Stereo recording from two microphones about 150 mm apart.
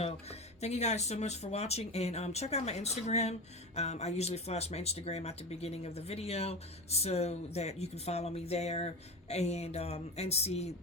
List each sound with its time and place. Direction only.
0.0 s speech: 45° left (ahead or behind)